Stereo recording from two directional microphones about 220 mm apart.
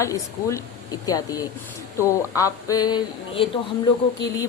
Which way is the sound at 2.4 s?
15° left (ahead or behind).